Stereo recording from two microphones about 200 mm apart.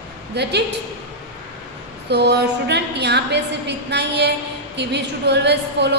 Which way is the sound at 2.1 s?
55° right (ahead or behind).